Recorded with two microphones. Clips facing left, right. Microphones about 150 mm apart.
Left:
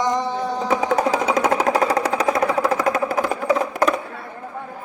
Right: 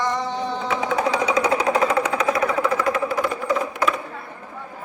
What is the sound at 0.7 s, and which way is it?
Music, 40° left (ahead or behind).